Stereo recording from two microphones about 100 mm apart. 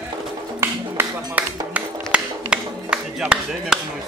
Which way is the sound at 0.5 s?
25° right (ahead or behind).